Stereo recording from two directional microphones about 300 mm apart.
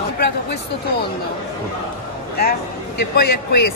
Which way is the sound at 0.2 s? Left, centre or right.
Left.